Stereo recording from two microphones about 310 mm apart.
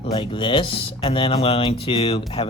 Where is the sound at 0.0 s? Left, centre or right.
Centre.